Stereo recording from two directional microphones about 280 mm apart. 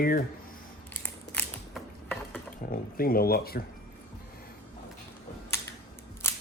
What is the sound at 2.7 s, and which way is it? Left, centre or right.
Speech, left.